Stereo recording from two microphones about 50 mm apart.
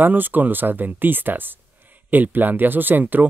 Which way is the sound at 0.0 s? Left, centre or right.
Right.